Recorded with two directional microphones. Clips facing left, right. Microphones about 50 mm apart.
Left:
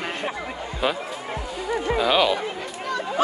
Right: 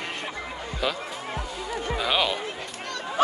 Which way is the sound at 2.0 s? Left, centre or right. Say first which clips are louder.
Left 5 dB; centre.